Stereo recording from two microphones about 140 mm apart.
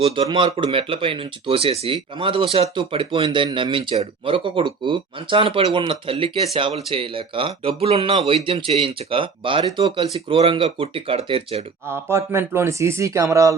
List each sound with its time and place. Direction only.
0.0 s speech: 40° right (ahead or behind)
11.9 s speech: 20° right (ahead or behind)